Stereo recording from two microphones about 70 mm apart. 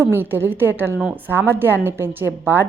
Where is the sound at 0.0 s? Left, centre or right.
Right.